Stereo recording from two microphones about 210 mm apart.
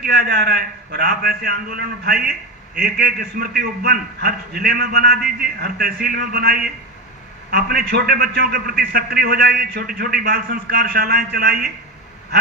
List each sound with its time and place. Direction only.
0.0 s a man's voice: 50° right (ahead or behind)